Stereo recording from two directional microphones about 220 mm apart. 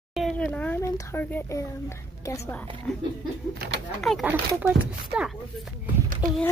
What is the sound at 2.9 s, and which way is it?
Speech, centre (ahead or behind).